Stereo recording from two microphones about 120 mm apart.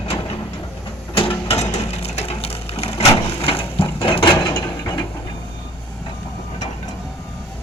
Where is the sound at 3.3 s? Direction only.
55° left (ahead or behind).